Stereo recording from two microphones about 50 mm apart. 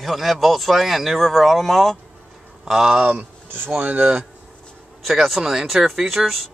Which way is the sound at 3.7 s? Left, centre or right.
Right.